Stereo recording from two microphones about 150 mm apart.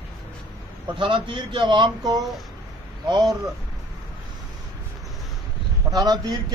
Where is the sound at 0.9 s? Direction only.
35° right (ahead or behind).